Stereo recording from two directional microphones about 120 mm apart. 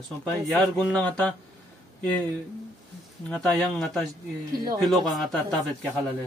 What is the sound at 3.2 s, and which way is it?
Speech, 5° left (ahead or behind).